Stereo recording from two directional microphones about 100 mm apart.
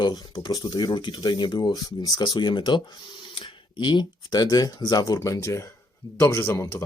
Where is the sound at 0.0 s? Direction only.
45° left (ahead or behind).